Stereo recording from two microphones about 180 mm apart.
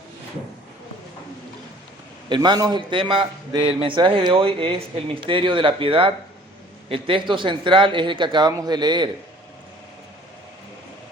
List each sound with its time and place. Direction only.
2.3 s a man's voice: 25° right (ahead or behind)